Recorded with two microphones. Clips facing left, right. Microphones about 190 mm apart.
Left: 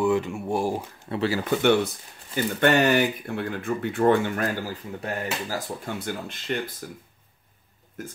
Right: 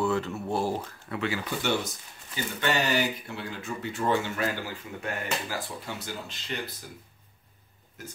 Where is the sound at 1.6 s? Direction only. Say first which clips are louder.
Left 9 dB; 60° left (ahead or behind).